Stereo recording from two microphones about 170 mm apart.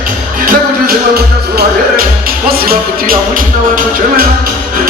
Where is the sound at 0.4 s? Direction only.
65° right (ahead or behind).